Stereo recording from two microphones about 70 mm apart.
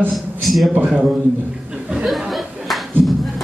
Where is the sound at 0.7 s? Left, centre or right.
Right.